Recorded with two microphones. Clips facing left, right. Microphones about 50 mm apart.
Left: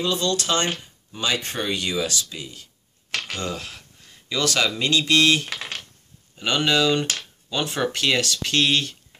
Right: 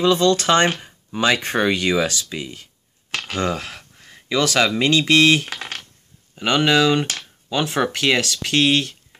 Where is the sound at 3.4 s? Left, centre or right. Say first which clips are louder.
Right 7 dB; right.